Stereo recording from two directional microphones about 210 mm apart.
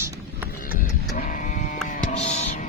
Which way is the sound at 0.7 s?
35° left (ahead or behind).